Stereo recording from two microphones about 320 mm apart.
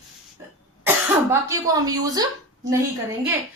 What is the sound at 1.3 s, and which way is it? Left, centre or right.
Speech, centre.